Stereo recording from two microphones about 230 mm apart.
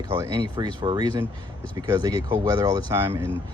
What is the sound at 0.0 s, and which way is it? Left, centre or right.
Speech, centre.